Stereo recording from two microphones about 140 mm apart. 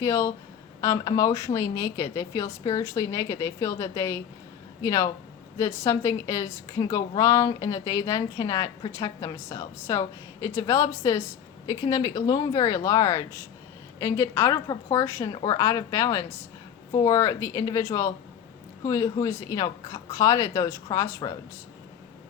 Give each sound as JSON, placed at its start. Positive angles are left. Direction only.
{"t": 0.0, "sound": "a woman's voice", "side_deg": 20}